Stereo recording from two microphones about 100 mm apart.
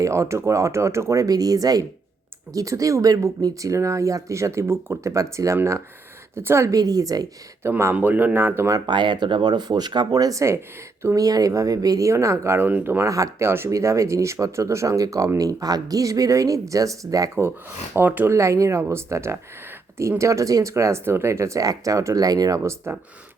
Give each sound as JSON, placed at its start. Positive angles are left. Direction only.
{"t": 0.0, "sound": "speech", "side_deg": -30}
{"t": 7.6, "sound": "speech", "side_deg": -25}
{"t": 8.9, "sound": "speech", "side_deg": -50}
{"t": 13.1, "sound": "speech", "side_deg": -35}
{"t": 17.9, "sound": "speech", "side_deg": -20}
{"t": 18.3, "sound": "speech", "side_deg": -30}